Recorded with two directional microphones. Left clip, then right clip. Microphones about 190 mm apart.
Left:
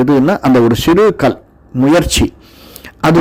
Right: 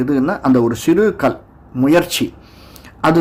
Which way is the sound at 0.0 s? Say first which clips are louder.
Left 6 dB; 45° left (ahead or behind).